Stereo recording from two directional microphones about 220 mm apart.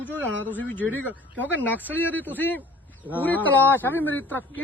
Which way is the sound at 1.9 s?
10° left (ahead or behind).